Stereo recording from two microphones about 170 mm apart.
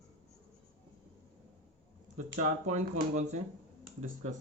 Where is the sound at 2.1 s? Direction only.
45° right (ahead or behind).